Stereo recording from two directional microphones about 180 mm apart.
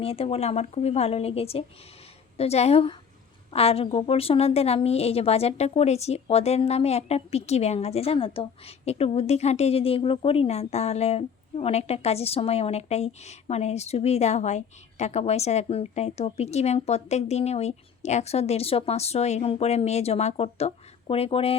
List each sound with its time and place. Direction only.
0.0 s a woman's voice: 35° left (ahead or behind)